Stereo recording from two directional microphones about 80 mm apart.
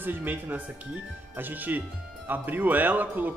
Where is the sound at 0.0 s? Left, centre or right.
Right.